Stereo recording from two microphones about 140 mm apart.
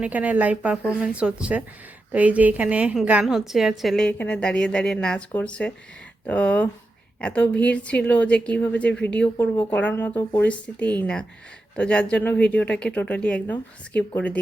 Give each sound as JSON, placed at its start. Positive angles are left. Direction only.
{"t": 0.0, "sound": "a woman's voice", "side_deg": -10}